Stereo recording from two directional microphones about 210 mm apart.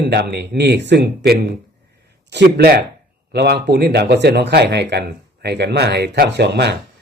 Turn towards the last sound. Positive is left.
turn(degrees=-55)  # may be behind; listen again after turning